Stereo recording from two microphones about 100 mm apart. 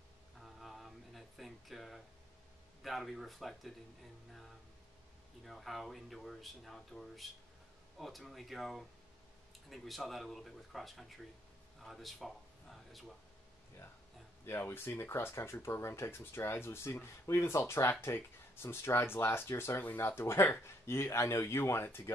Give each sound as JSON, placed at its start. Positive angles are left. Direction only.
{"t": 0.4, "sound": "a sound", "side_deg": 0}
{"t": 2.8, "sound": "speech", "side_deg": 0}
{"t": 5.4, "sound": "speech", "side_deg": 0}
{"t": 14.4, "sound": "speech", "side_deg": 25}